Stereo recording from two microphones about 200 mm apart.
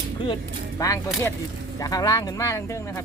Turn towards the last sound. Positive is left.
turn(degrees=15)  # may be behind; listen again after turning